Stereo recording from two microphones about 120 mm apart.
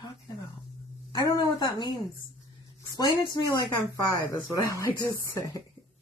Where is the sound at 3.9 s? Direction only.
30° left (ahead or behind).